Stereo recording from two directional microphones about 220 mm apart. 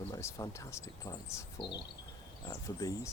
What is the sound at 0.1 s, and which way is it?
Speech, 15° left (ahead or behind).